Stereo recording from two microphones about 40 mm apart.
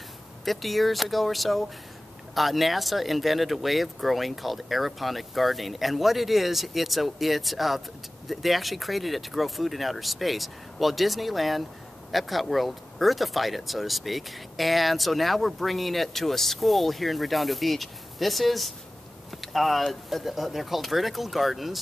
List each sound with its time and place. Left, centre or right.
0.5 s speech: centre